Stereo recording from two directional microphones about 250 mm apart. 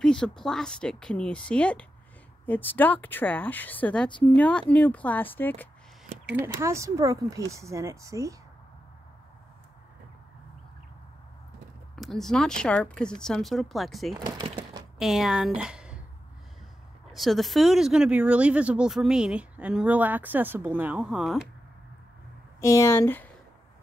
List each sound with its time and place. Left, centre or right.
0.0 s a woman's voice: centre
6.3 s speech: centre
11.9 s speech: centre
14.1 s a sound: centre
15.0 s a woman's voice: centre
17.1 s speech: centre
22.6 s a woman's voice: centre